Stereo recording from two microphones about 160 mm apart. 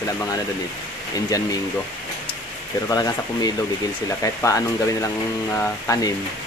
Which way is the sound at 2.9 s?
25° left (ahead or behind).